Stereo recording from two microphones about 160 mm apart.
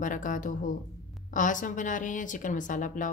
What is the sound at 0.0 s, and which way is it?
A woman's voice, 55° left (ahead or behind).